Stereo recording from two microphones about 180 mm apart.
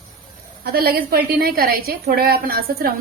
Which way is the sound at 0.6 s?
60° right (ahead or behind).